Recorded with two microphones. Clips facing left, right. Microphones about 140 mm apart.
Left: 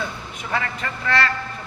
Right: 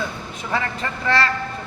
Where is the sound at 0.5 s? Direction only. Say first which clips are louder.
Right 1 dB; 30° right (ahead or behind).